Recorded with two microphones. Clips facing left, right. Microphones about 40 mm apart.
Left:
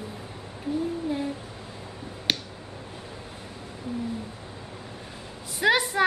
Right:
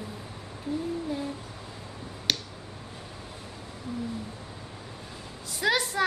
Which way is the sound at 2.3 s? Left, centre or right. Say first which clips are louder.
Left 1 dB; left.